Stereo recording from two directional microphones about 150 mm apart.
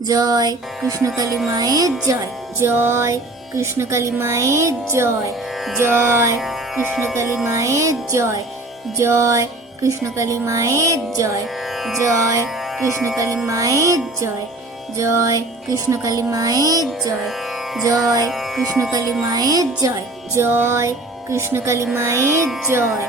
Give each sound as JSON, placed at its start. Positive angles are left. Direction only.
{"t": 0.1, "sound": "music", "side_deg": -25}
{"t": 5.8, "sound": "speech", "side_deg": -15}
{"t": 7.4, "sound": "music", "side_deg": -20}
{"t": 12.3, "sound": "music", "side_deg": -20}
{"t": 17.8, "sound": "music", "side_deg": -25}
{"t": 18.3, "sound": "music", "side_deg": 0}
{"t": 18.6, "sound": "music", "side_deg": -25}
{"t": 20.3, "sound": "speech", "side_deg": -15}